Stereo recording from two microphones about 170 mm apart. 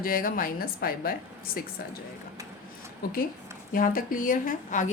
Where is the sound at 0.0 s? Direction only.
55° left (ahead or behind).